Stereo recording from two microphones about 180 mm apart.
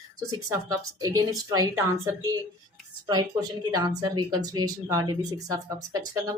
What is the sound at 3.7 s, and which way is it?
Speech, 20° right (ahead or behind).